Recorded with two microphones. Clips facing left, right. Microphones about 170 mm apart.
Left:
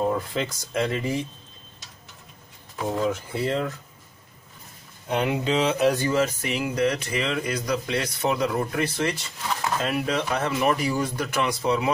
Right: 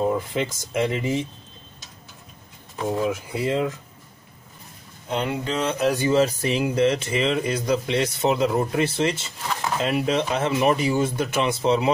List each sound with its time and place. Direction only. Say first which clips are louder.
0.0 s speech: right 2 dB; 15° right (ahead or behind)
2.9 s speech: right 1 dB; 10° right (ahead or behind)
5.1 s speech: left 2 dB; 10° left (ahead or behind)
5.6 s speech: left 1 dB; centre (ahead or behind)
6.1 s speech: right 4 dB; 30° right (ahead or behind)